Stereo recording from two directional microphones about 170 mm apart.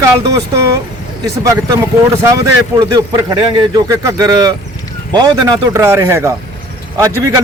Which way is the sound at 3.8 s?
20° right (ahead or behind).